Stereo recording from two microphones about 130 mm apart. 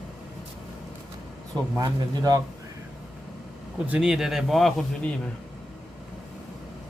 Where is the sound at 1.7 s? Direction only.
30° right (ahead or behind).